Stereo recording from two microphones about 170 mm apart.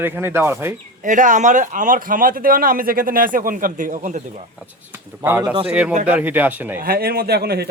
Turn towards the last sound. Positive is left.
turn(degrees=-70)  # may be behind; listen again after turning